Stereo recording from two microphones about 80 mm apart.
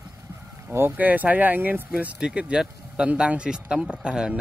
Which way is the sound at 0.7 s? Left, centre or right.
Right.